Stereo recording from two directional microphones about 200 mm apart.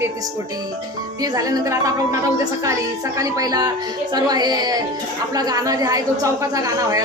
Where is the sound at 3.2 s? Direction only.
20° right (ahead or behind).